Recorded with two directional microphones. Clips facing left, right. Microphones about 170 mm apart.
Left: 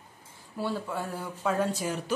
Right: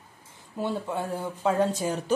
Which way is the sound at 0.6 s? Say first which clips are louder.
Right 3 dB; 20° right (ahead or behind).